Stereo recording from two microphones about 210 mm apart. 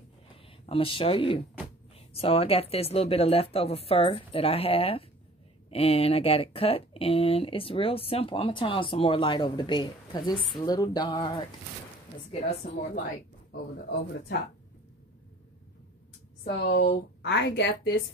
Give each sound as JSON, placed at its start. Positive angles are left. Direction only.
{"t": 0.7, "sound": "speech", "side_deg": 25}
{"t": 12.3, "sound": "a woman's voice", "side_deg": 35}
{"t": 16.4, "sound": "a woman's voice", "side_deg": 50}